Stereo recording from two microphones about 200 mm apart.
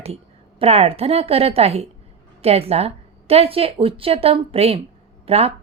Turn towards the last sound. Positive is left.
turn(degrees=-30)  # may be behind; listen again after turning